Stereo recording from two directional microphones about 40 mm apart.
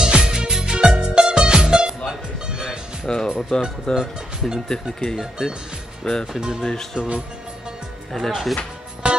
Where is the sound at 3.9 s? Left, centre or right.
Centre.